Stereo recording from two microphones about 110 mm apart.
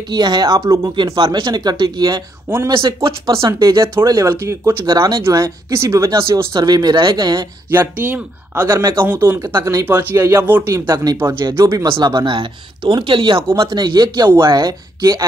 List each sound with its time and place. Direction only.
0.1 s speech: 40° right (ahead or behind)
1.1 s speech: 50° right (ahead or behind)
2.7 s speech: 50° right (ahead or behind)
3.4 s speech: 30° right (ahead or behind)
7.7 s speech: 20° right (ahead or behind)
11.7 s speech: 40° right (ahead or behind)